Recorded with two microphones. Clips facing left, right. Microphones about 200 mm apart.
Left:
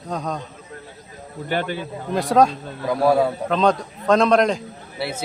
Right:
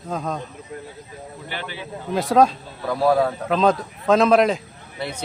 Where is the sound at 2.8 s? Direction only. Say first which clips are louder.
Left 1 dB; 10° left (ahead or behind).